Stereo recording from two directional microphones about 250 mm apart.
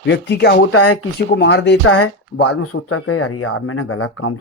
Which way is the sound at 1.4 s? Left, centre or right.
Left.